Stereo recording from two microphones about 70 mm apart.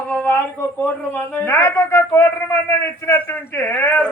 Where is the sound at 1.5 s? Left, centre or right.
Left.